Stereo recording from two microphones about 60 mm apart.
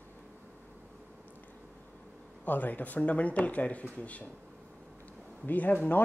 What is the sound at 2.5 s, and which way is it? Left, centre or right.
Speech, left.